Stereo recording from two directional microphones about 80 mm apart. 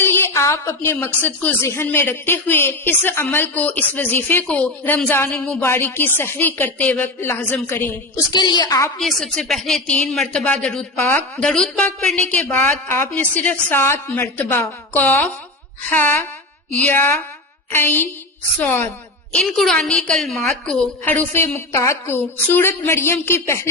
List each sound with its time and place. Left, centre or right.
0.0 s a sound: left
1.0 s speech: left
8.3 s a woman's voice: left
9.0 s a woman's voice: centre
9.8 s a woman's voice: centre
10.1 s a woman's voice: centre
10.4 s a woman's voice: centre
12.2 s speech: centre
13.7 s speech: left
19.5 s a woman's voice: centre
21.0 s speech: left
21.3 s a woman's voice: left